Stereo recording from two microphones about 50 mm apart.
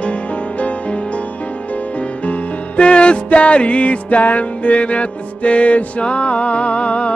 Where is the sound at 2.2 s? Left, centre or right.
Left.